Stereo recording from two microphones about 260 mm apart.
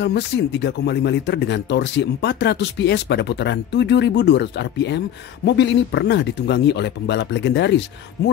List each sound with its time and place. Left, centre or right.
0.0 s speech: left